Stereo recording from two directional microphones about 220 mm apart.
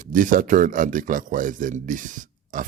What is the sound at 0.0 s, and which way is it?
Speech, 35° right (ahead or behind).